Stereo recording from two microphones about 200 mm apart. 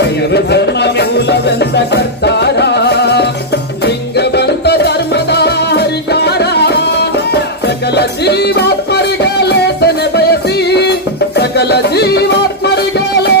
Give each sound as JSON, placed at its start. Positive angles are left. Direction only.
{"t": 0.0, "sound": "music", "side_deg": 55}